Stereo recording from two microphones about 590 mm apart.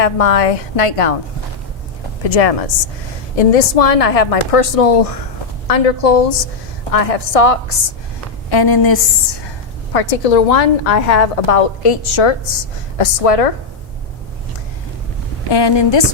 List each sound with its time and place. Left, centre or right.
0.0 s a woman's voice: left
2.2 s a woman's voice: left
8.4 s a woman's voice: left
9.9 s a woman's voice: left
13.0 s a woman's voice: left
15.5 s a woman's voice: left